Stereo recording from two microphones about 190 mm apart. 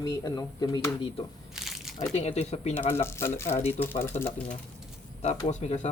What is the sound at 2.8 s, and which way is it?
Speech, 15° left (ahead or behind).